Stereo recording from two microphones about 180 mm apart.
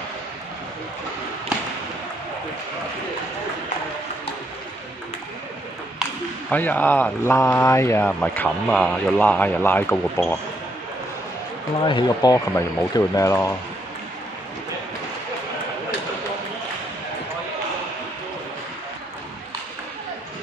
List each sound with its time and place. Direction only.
6.5 s speech: 10° left (ahead or behind)
11.8 s speech: 25° left (ahead or behind)